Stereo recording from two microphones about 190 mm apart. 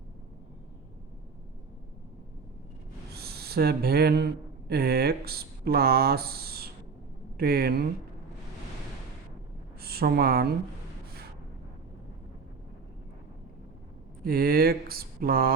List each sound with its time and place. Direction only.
3.2 s speech: 55° right (ahead or behind)
9.8 s a woman's voice: 55° right (ahead or behind)
14.3 s speech: 50° right (ahead or behind)